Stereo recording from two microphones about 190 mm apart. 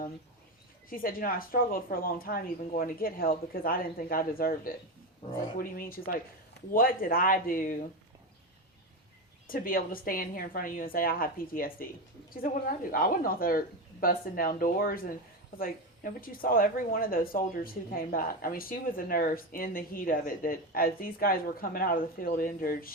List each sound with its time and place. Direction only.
0.9 s speech: 50° left (ahead or behind)
9.5 s speech: 50° left (ahead or behind)
12.9 s speech: 50° left (ahead or behind)